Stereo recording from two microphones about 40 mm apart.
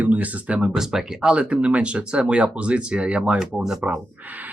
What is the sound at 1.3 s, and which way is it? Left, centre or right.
Speech, right.